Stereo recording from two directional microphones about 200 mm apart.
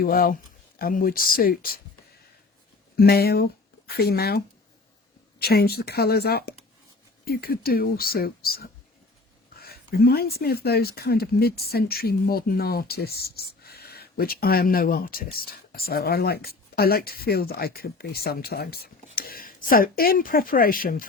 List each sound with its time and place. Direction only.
0.0 s speech: 45° left (ahead or behind)
2.9 s speech: 50° left (ahead or behind)